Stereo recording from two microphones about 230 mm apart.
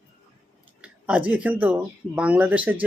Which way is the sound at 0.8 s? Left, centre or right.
Centre.